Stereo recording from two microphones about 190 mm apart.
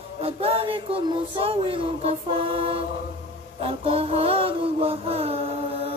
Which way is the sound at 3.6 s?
30° right (ahead or behind).